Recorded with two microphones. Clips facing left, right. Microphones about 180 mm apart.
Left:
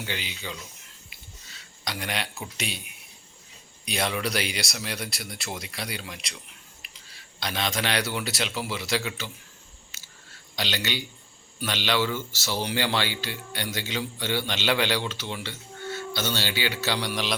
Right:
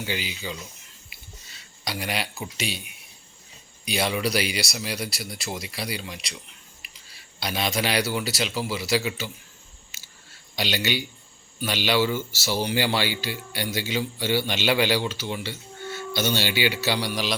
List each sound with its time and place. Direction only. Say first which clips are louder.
0.0 s speech: right 4 dB; 5° right (ahead or behind)
1.8 s speech: right 2 dB; 5° right (ahead or behind)
7.3 s speech: right 3 dB; 10° right (ahead or behind)
9.9 s a sound: even; 10° right (ahead or behind)
10.5 s speech: right 4 dB; 10° right (ahead or behind)